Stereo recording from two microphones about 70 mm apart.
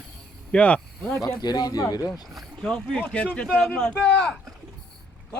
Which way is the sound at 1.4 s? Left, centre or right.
Left.